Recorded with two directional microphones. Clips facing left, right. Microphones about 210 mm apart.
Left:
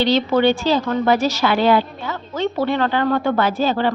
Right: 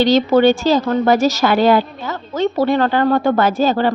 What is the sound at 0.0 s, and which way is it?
A woman's voice, 45° right (ahead or behind).